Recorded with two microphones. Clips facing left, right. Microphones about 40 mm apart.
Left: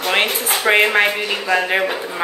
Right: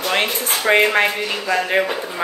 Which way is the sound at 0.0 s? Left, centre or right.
Centre.